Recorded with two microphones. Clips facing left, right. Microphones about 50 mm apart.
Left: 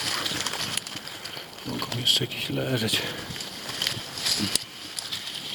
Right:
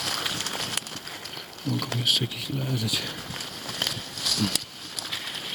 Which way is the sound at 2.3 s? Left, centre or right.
Left.